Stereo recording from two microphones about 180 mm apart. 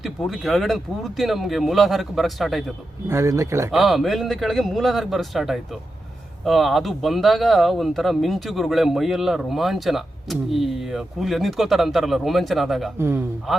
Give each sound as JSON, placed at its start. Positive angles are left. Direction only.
{"t": 0.0, "sound": "speech", "side_deg": 0}
{"t": 3.1, "sound": "speech", "side_deg": -15}
{"t": 3.7, "sound": "speech", "side_deg": 0}
{"t": 13.0, "sound": "speech", "side_deg": -15}
{"t": 13.5, "sound": "speech", "side_deg": 0}